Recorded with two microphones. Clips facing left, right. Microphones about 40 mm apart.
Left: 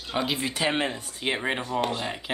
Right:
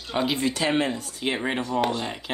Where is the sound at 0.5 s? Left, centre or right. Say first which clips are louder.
Right 2 dB; centre.